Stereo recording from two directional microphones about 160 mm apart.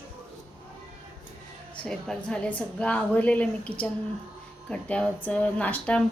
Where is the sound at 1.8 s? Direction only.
5° left (ahead or behind).